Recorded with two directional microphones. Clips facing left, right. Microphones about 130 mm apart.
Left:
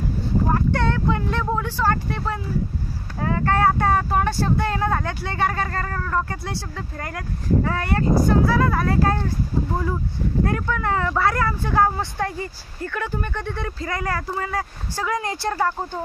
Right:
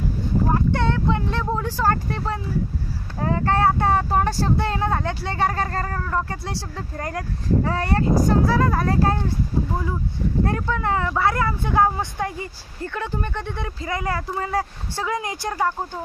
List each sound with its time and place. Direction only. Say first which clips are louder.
0.6 s a sound: even; 20° right (ahead or behind)
1.9 s speech: right 2 dB; 35° right (ahead or behind)
10.4 s speech: even; 25° right (ahead or behind)